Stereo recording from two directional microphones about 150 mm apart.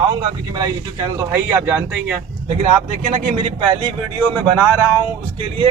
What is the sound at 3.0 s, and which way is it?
Speech, 45° right (ahead or behind).